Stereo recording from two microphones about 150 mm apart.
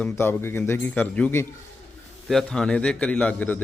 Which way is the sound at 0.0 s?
15° left (ahead or behind).